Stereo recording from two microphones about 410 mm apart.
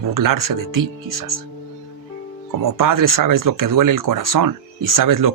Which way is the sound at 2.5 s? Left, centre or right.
Right.